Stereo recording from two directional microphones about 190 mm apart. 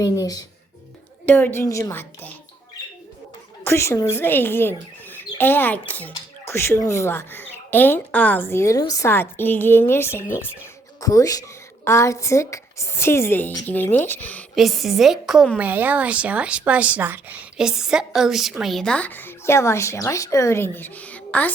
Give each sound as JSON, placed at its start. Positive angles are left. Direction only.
{"t": 0.0, "sound": "a woman's voice", "side_deg": 20}
{"t": 3.6, "sound": "a woman's voice", "side_deg": 15}